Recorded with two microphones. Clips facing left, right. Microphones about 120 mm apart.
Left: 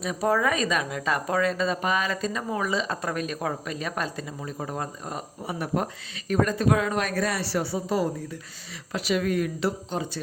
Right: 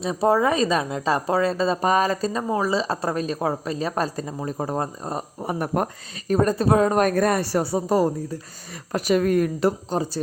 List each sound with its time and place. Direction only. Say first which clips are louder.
0.0 s a woman's voice: right 4 dB; 30° right (ahead or behind)